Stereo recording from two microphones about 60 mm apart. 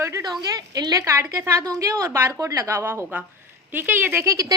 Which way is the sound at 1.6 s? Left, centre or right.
Right.